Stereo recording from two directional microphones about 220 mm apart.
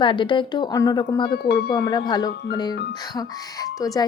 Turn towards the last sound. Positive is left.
turn(degrees=15)  # may be behind; listen again after turning